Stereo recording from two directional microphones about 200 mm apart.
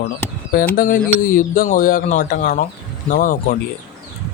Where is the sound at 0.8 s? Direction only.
45° left (ahead or behind).